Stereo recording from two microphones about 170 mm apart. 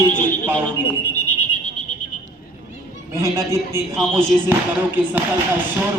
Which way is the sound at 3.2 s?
15° right (ahead or behind).